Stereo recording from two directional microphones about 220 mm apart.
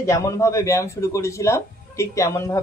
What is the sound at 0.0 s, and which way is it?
A woman's voice, 15° left (ahead or behind).